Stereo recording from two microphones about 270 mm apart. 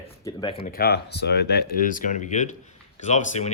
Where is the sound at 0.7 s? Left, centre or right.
Left.